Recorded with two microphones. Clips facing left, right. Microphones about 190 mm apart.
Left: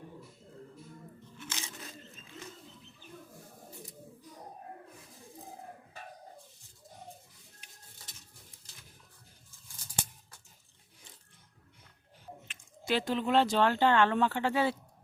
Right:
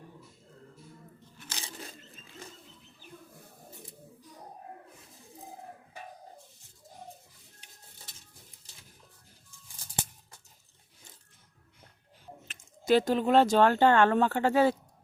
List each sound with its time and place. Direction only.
1.4 s crunch: 35° right (ahead or behind)
12.5 s speech: 40° right (ahead or behind)